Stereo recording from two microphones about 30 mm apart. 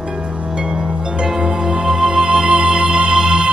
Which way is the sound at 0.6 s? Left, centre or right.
Right.